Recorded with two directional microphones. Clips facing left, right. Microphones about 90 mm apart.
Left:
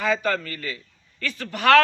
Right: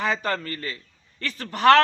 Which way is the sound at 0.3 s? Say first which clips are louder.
Left 2 dB; 35° right (ahead or behind).